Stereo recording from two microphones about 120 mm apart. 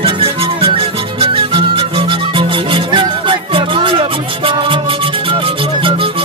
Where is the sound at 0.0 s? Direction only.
50° right (ahead or behind).